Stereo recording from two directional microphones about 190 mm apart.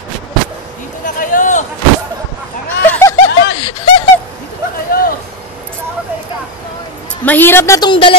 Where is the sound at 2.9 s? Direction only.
15° left (ahead or behind).